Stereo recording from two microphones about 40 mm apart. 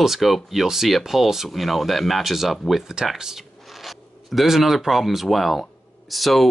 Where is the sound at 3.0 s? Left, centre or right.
Centre.